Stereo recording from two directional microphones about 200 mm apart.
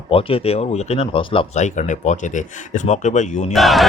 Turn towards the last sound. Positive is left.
turn(degrees=0)  # may be behind; listen again after turning